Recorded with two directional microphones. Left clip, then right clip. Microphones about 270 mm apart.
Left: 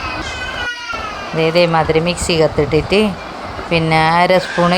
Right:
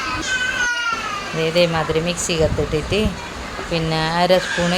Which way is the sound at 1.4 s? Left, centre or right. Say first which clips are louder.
Left 5 dB; centre.